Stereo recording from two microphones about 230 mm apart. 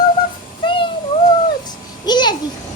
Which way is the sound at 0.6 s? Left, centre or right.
Left.